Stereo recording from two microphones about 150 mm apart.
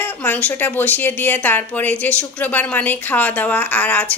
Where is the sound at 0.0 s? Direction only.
10° left (ahead or behind).